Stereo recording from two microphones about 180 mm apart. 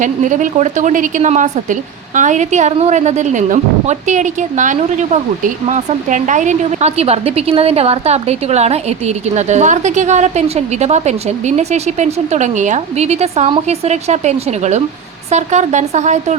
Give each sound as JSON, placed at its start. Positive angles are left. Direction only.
{"t": 0.0, "sound": "a woman's voice", "side_deg": -45}